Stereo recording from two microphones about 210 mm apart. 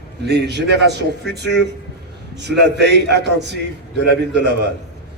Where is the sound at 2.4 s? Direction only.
55° right (ahead or behind).